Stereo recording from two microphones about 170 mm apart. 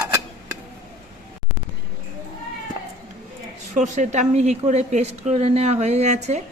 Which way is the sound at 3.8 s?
45° right (ahead or behind).